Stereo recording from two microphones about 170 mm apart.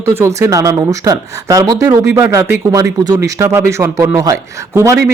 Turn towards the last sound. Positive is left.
turn(degrees=-15)  # may be behind; listen again after turning